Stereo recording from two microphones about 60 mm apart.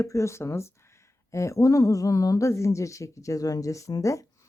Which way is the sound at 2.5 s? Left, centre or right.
Left.